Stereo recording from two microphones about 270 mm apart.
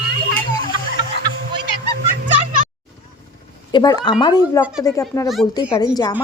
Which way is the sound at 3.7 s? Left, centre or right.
Centre.